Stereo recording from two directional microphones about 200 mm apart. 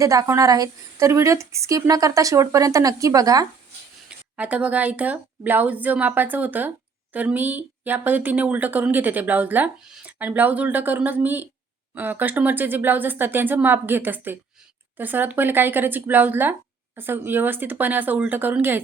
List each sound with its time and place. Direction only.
0.0 s a woman's voice: 15° right (ahead or behind)
4.4 s a woman's voice: 5° right (ahead or behind)